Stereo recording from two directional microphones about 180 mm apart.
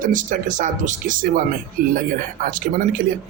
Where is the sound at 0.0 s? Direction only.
45° right (ahead or behind).